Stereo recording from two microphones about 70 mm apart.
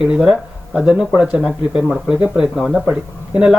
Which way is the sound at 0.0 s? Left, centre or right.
Centre.